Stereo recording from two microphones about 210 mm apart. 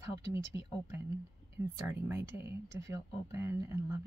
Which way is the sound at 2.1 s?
10° right (ahead or behind).